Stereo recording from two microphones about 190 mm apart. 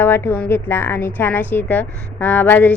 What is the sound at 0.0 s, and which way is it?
Speech, 10° left (ahead or behind).